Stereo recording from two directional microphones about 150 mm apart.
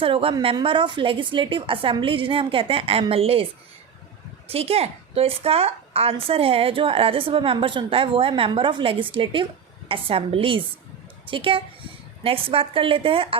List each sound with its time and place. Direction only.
0.0 s a woman's voice: 35° right (ahead or behind)
4.4 s a woman's voice: 40° right (ahead or behind)